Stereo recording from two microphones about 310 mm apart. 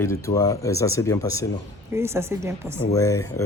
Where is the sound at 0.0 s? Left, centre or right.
Centre.